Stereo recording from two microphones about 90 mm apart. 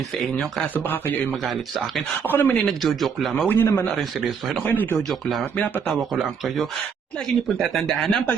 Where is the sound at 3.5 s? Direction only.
25° left (ahead or behind).